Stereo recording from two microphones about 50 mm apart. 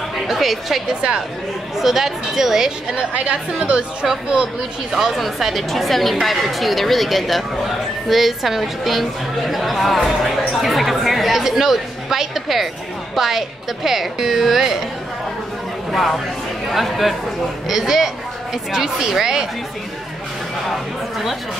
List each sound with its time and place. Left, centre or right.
0.3 s a woman's voice: centre
3.1 s a woman's voice: right
4.9 s a woman's voice: centre
15.9 s a woman's voice: centre